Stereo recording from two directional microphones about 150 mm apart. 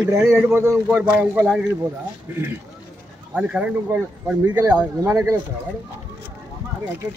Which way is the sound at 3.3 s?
10° right (ahead or behind).